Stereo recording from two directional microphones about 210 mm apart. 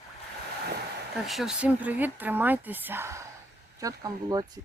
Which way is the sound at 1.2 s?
Centre (ahead or behind).